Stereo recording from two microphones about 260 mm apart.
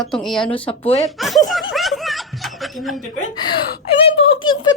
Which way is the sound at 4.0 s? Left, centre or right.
Left.